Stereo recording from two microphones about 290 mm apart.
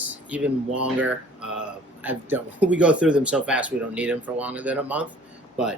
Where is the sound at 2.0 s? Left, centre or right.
Centre.